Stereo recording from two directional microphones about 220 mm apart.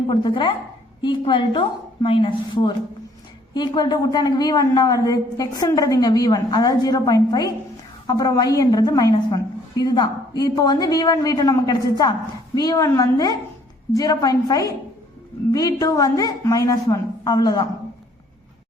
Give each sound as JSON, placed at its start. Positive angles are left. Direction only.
{"t": 0.1, "sound": "a woman's voice", "side_deg": 20}